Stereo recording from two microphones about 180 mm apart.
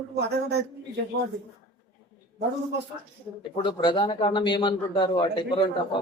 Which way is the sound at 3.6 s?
25° left (ahead or behind).